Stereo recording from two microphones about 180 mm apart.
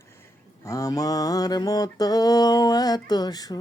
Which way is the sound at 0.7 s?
20° left (ahead or behind).